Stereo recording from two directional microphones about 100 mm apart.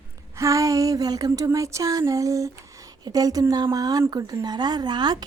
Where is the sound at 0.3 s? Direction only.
35° right (ahead or behind).